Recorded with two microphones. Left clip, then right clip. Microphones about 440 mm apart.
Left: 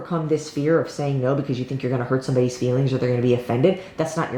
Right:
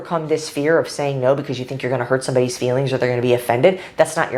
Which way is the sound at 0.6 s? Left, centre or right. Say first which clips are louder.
Right 5 dB; right.